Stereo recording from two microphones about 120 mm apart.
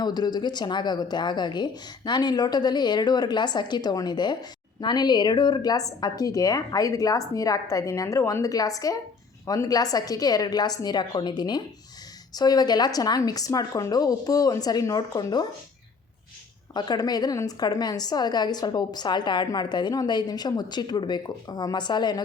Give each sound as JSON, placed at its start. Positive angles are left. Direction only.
{"t": 0.0, "sound": "a woman's voice", "side_deg": 35}
{"t": 16.7, "sound": "a woman's voice", "side_deg": 35}